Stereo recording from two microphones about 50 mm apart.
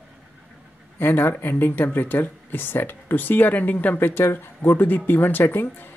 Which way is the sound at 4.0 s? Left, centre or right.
Left.